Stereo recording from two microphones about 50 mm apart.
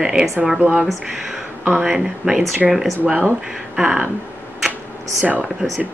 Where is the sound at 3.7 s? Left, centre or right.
Centre.